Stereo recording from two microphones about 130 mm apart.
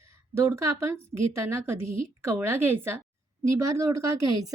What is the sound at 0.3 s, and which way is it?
A woman's voice, 20° right (ahead or behind).